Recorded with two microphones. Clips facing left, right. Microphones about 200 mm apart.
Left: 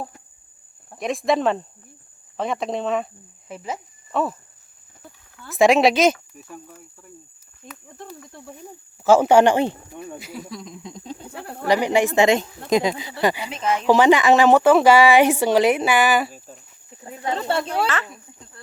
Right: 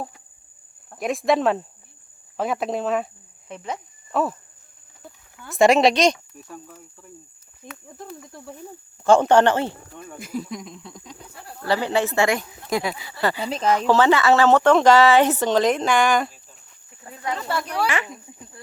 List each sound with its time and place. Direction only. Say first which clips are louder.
0.9 s speech: even; centre (ahead or behind)
5.5 s speech: even; centre (ahead or behind)
10.2 s speech: right 5 dB; 50° right (ahead or behind)
10.8 s cricket: left 6 dB; 25° left (ahead or behind)
11.3 s cricket: left 6 dB; 65° left (ahead or behind)
11.7 s speech: left 3 dB; 15° left (ahead or behind)
13.4 s speech: right 3 dB; 35° right (ahead or behind)
13.8 s speech: left 4 dB; 15° left (ahead or behind)
17.0 s speech: left 3 dB; 20° left (ahead or behind)
17.8 s snake: even; 15° right (ahead or behind)